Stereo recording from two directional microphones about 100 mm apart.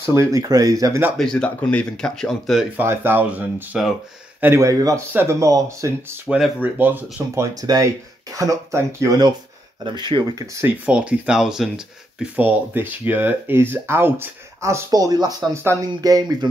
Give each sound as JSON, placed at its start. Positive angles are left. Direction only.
{"t": 0.0, "sound": "speech", "side_deg": -30}
{"t": 1.1, "sound": "speech", "side_deg": 5}
{"t": 2.8, "sound": "speech", "side_deg": -25}
{"t": 4.4, "sound": "speech", "side_deg": -25}
{"t": 6.2, "sound": "speech", "side_deg": -10}
{"t": 6.6, "sound": "speech", "side_deg": -20}
{"t": 7.6, "sound": "speech", "side_deg": -40}
{"t": 9.8, "sound": "speech", "side_deg": -50}
{"t": 10.4, "sound": "speech", "side_deg": -30}
{"t": 10.9, "sound": "speech", "side_deg": -10}
{"t": 12.4, "sound": "speech", "side_deg": -20}
{"t": 15.5, "sound": "speech", "side_deg": -30}
{"t": 16.0, "sound": "speech", "side_deg": -40}